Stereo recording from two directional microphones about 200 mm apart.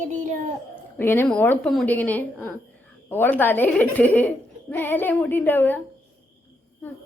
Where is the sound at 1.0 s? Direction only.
10° left (ahead or behind).